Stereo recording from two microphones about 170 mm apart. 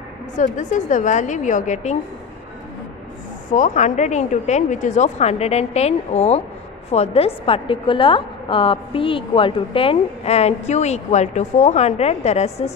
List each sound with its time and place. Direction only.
0.4 s a woman's voice: 45° left (ahead or behind)
3.4 s a woman's voice: 45° left (ahead or behind)